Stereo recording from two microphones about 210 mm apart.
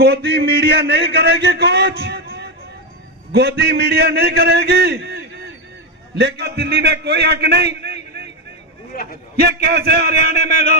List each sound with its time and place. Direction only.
0.0 s a man's voice: 50° right (ahead or behind)
9.4 s a man's voice: 50° right (ahead or behind)